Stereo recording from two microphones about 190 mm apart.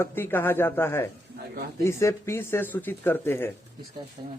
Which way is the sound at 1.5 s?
55° right (ahead or behind).